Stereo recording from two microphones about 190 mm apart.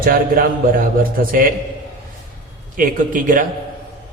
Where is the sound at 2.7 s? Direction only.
45° right (ahead or behind).